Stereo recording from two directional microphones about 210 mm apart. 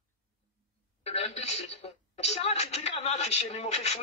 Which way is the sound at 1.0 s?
30° left (ahead or behind).